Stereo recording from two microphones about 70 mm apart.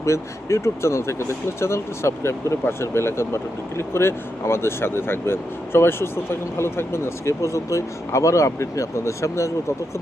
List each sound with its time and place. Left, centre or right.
0.0 s speech: left